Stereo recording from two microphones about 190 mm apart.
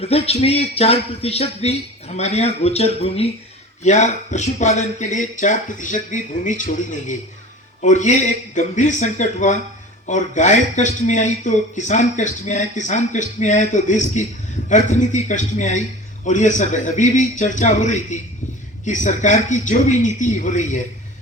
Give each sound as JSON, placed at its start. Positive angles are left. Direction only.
{"t": 0.0, "sound": "speech", "side_deg": 30}